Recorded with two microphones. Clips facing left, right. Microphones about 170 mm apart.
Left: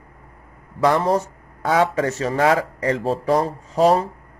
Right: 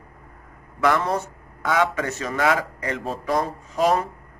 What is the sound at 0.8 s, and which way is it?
Speech, 35° left (ahead or behind).